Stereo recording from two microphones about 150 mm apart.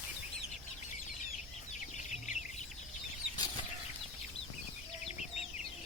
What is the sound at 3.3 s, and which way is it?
Bird flight, 25° left (ahead or behind).